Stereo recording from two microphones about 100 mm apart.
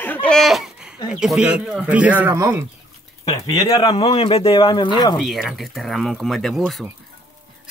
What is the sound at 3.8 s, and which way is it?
Speech, 70° left (ahead or behind).